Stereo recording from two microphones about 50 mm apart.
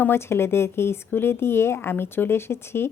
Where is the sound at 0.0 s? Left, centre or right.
Left.